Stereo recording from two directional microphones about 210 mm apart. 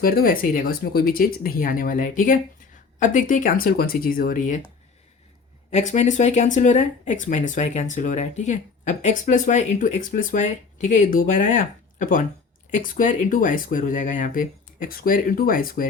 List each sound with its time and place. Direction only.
0.0 s speech: 45° left (ahead or behind)
5.7 s speech: 35° left (ahead or behind)